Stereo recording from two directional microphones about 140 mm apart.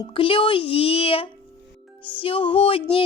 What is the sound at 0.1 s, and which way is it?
Speech, 40° left (ahead or behind).